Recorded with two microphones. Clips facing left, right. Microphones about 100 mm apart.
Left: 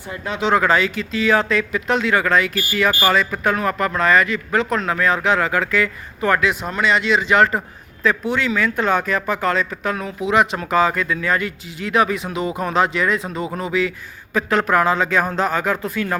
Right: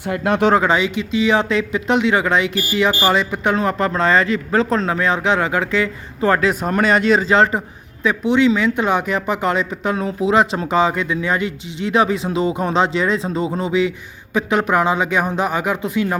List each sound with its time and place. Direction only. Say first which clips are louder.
0.0 s speech: right 7 dB; 70° right (ahead or behind)
0.5 s speech: right 1 dB; 20° right (ahead or behind)
8.0 s a man's voice: right 5 dB; 20° right (ahead or behind)